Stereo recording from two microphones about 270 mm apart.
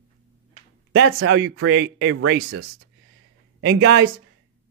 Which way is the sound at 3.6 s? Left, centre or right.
Right.